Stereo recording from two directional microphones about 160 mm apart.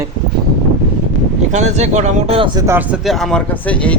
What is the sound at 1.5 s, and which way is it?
Speech, 45° right (ahead or behind).